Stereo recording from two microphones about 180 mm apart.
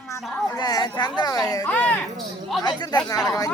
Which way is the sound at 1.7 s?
10° left (ahead or behind).